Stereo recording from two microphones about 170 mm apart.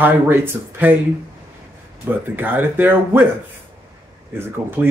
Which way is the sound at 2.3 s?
10° right (ahead or behind).